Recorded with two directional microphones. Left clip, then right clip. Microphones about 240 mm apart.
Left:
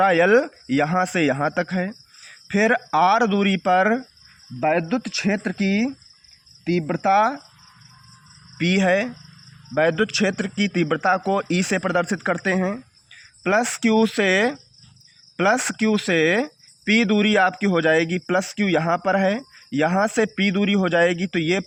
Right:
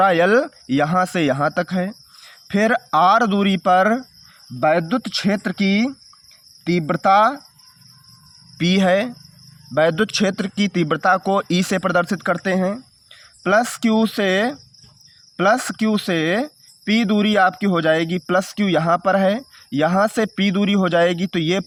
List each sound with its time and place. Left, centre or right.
0.0 s speech: right
8.5 s speech: right